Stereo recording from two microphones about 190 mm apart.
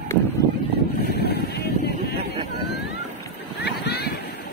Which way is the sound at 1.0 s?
55° left (ahead or behind).